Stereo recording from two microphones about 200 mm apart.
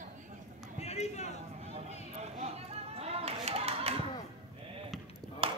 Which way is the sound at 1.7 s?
35° right (ahead or behind).